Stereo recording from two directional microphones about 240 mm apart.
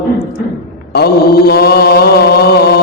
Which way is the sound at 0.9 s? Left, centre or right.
Left.